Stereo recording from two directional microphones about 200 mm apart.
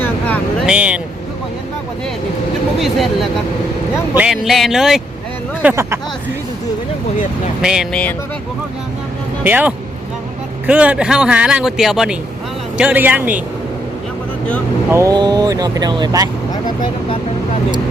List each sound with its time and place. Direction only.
0.6 s speech: 5° right (ahead or behind)
2.8 s speech: centre (ahead or behind)
5.6 s speech: 15° right (ahead or behind)
7.6 s speech: 5° right (ahead or behind)
9.4 s speech: 10° right (ahead or behind)
14.8 s speech: 15° right (ahead or behind)